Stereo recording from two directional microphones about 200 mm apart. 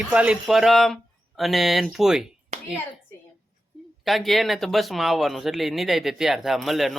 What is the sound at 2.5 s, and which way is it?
Clapping, 40° right (ahead or behind).